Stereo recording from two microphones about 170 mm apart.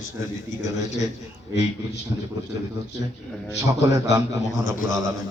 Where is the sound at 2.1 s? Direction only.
25° right (ahead or behind).